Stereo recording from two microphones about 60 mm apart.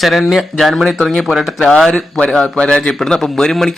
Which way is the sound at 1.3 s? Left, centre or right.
Centre.